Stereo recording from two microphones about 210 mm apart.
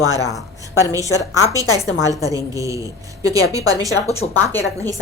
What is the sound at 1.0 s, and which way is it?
Speech, 15° left (ahead or behind).